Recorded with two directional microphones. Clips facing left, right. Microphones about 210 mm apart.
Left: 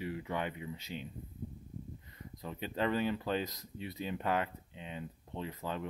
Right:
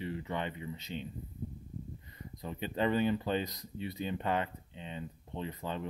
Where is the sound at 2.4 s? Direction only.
Centre (ahead or behind).